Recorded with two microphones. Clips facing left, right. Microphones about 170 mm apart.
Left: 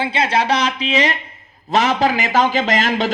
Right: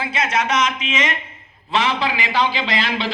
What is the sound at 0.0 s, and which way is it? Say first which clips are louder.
A man's voice: left 4 dB; 30° left (ahead or behind).